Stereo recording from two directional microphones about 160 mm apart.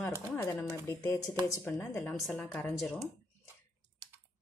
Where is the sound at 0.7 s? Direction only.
20° left (ahead or behind); by 2.7 s 5° left (ahead or behind).